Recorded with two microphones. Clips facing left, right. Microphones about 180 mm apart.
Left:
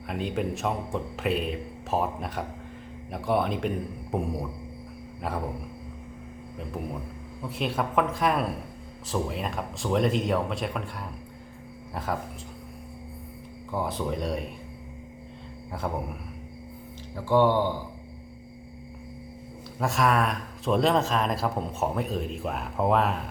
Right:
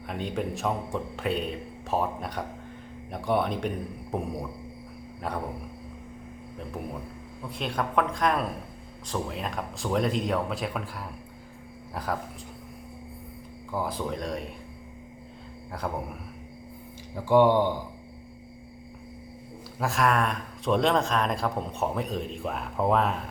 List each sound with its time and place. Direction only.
0.1 s speech: centre (ahead or behind)
7.4 s speech: 5° left (ahead or behind)
13.7 s speech: centre (ahead or behind)
17.2 s speech: 15° right (ahead or behind)
19.8 s speech: centre (ahead or behind)